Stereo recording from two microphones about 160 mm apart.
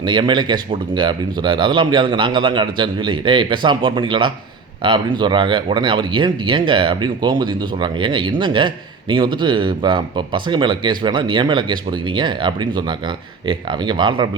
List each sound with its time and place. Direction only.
0.0 s speech: 30° right (ahead or behind)